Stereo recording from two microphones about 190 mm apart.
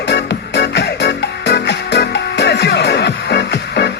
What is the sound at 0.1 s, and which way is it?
Music, 65° left (ahead or behind).